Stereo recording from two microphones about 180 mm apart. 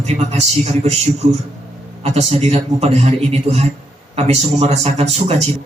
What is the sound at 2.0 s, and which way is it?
Speech, 35° right (ahead or behind).